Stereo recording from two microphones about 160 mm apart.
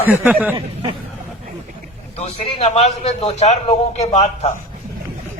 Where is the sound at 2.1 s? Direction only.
40° left (ahead or behind).